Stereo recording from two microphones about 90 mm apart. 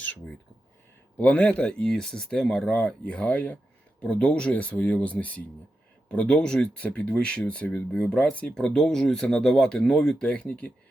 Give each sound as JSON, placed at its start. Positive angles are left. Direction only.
{"t": 0.0, "sound": "speech", "side_deg": 20}